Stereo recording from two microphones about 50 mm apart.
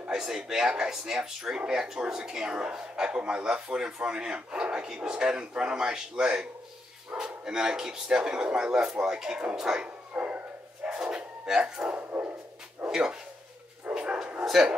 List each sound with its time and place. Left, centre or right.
0.1 s speech: centre
10.1 s dog: right
10.8 s bow-wow: centre
11.9 s dog: right
12.8 s speech: centre
13.9 s bow-wow: centre
14.4 s a sound: centre